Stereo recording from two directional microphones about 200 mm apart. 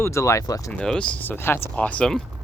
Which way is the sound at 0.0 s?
15° left (ahead or behind).